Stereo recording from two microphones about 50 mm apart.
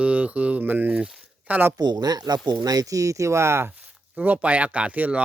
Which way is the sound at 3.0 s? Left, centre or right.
Right.